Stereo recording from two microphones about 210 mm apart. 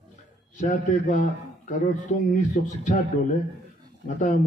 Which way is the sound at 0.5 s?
35° left (ahead or behind).